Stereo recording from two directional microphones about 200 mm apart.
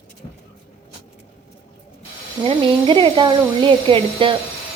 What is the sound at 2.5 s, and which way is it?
A woman's voice, 25° right (ahead or behind).